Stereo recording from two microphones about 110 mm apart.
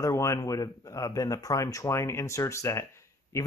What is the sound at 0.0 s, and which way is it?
Speech, 25° left (ahead or behind).